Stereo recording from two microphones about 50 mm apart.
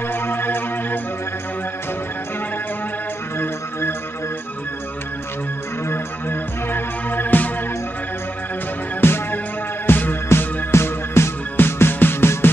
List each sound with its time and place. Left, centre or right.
0.1 s music: left
5.9 s music: left
9.0 s music: left
10.2 s music: left